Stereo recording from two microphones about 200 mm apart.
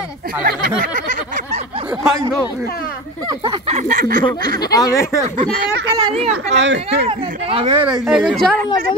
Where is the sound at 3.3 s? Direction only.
30° right (ahead or behind).